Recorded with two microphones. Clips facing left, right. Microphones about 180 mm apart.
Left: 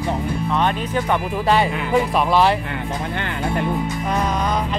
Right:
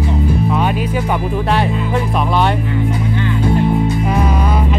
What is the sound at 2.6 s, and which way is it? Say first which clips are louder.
Music: right 7 dB; 60° left (ahead or behind).